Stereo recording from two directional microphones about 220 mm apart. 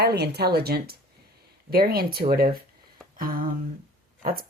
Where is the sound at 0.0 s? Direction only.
45° right (ahead or behind).